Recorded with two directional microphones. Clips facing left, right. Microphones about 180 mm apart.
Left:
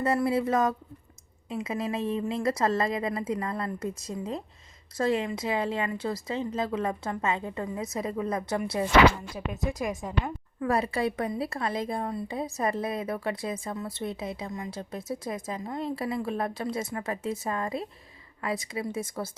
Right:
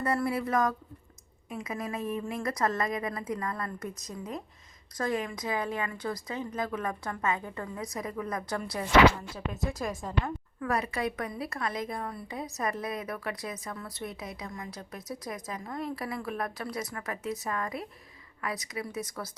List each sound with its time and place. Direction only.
0.0 s a woman's voice: 25° left (ahead or behind)
10.6 s a woman's voice: 30° left (ahead or behind)